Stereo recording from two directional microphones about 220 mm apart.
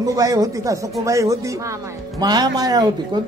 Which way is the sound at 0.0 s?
15° right (ahead or behind).